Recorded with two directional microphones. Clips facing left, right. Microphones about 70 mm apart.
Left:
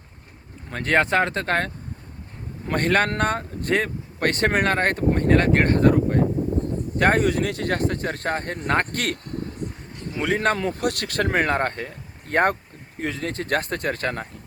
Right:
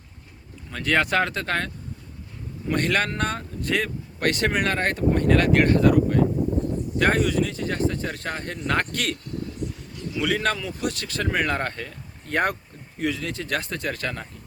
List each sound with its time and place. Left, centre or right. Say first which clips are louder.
0.7 s speech: left 2 dB; left